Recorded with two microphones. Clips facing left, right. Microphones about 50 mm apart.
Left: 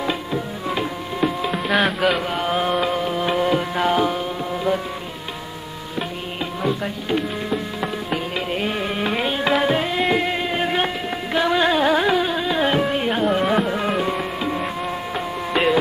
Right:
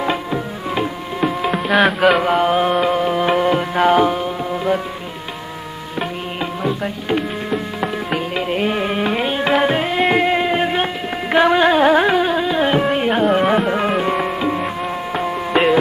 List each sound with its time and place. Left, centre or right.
0.0 s music: right
0.7 s a sound: centre
1.5 s music: centre
2.4 s music: centre
3.1 s music: right
7.1 s music: right
11.2 s music: right
11.5 s carnatic music: right
13.8 s music: centre
14.6 s insect: centre